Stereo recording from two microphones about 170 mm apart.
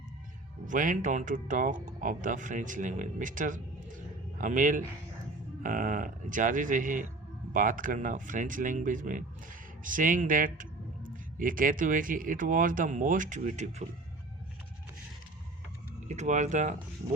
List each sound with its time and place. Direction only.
0.6 s a man's voice: 50° right (ahead or behind)
16.0 s speech: 45° right (ahead or behind)